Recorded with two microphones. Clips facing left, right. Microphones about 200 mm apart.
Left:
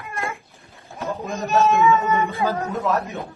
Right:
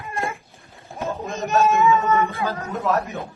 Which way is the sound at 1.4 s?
20° right (ahead or behind).